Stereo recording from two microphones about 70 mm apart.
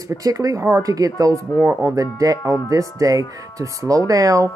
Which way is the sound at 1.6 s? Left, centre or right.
Right.